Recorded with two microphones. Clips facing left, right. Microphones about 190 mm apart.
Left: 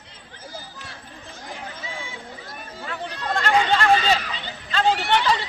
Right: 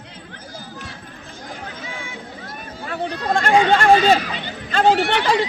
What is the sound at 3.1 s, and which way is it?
Chatter, 35° right (ahead or behind).